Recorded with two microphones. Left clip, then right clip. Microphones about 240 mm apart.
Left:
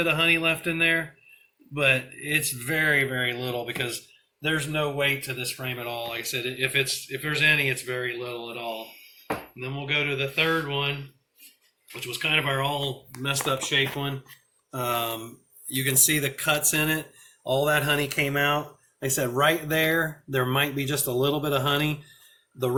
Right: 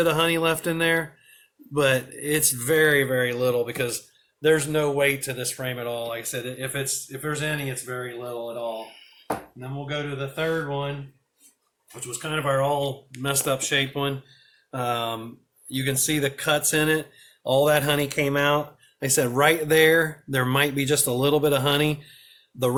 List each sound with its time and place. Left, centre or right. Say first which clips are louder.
0.0 s speech: right 1 dB; right; by 7.7 s centre
9.6 s speech: left 4 dB; centre
11.9 s speech: left 5 dB; centre; by 21.9 s right